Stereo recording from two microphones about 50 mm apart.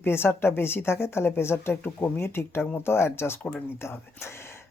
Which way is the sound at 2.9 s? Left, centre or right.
Left.